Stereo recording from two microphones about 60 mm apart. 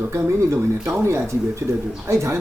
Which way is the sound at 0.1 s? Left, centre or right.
Right.